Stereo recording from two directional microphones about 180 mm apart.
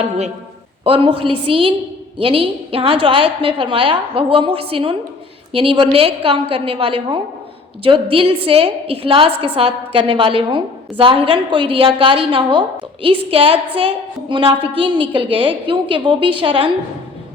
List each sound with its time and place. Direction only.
0.9 s a woman's voice: 30° right (ahead or behind)